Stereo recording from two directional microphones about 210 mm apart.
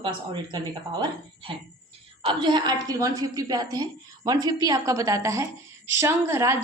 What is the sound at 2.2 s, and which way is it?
A woman's voice, 20° right (ahead or behind).